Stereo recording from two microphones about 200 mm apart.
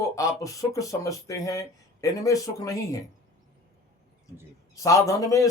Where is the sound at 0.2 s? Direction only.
15° left (ahead or behind).